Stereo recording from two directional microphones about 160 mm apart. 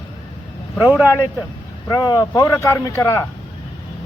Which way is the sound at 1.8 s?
25° left (ahead or behind).